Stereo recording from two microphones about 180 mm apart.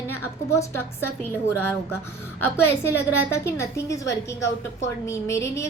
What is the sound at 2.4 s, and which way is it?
A woman's voice, 10° left (ahead or behind).